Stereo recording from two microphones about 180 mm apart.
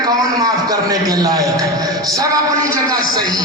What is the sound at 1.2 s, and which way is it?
Speech, 20° right (ahead or behind).